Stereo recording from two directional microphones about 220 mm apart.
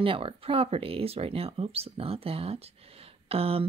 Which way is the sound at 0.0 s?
25° right (ahead or behind).